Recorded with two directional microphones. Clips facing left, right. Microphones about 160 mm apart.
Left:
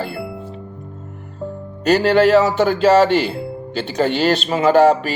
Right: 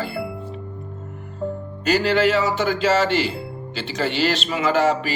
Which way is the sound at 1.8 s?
45° left (ahead or behind).